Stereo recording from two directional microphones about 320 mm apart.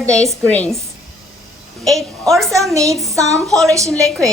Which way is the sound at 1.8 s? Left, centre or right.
Centre.